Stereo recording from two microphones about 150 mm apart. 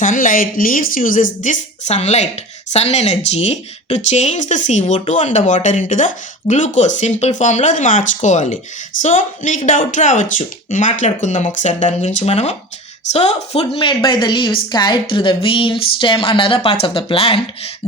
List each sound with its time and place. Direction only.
0.0 s a woman's voice: 60° left (ahead or behind); by 17.7 s 40° left (ahead or behind)